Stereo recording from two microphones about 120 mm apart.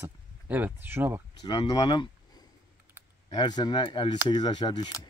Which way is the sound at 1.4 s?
45° left (ahead or behind).